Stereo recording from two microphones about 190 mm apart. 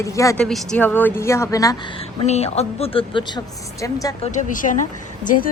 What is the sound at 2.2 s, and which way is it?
A woman's voice, 35° left (ahead or behind).